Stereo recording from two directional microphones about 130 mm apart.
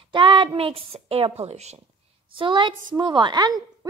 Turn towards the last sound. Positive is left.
turn(degrees=-30)  # may be behind; listen again after turning